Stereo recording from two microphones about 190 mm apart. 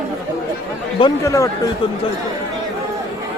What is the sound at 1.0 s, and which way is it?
Speech, 20° left (ahead or behind).